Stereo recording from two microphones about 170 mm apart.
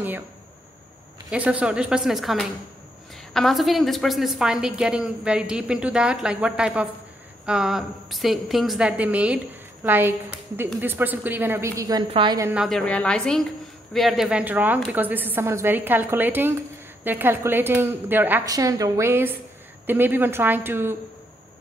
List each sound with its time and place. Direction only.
1.3 s a woman's voice: 5° right (ahead or behind)
12.1 s a woman's voice: 30° right (ahead or behind)
12.5 s a woman's voice: centre (ahead or behind)